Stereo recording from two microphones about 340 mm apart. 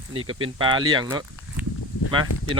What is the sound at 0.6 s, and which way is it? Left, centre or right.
Speech, centre.